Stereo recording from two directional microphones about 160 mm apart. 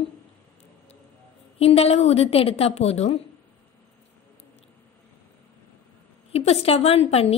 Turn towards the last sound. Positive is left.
turn(degrees=40)  # may be behind; listen again after turning